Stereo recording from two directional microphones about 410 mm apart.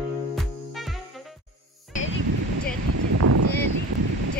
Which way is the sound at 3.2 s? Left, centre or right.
Right.